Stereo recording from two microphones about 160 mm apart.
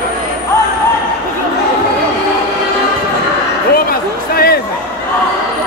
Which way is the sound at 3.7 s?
70° left (ahead or behind).